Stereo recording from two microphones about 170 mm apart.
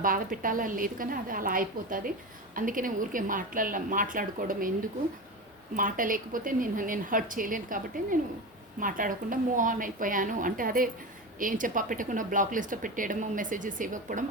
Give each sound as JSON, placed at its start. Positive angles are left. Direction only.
{"t": 0.0, "sound": "a woman's voice", "side_deg": -55}
{"t": 5.7, "sound": "speech", "side_deg": -55}